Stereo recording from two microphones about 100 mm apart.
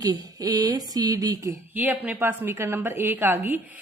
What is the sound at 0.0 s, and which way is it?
Speech, 40° right (ahead or behind).